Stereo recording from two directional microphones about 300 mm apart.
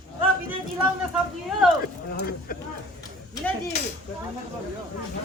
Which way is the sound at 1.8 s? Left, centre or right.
Left.